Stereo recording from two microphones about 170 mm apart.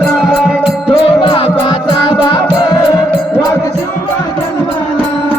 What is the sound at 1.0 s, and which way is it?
Music, 30° left (ahead or behind).